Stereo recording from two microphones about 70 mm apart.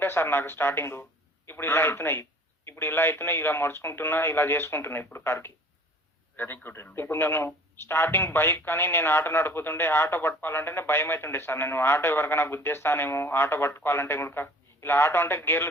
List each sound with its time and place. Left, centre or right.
0.0 s speech: left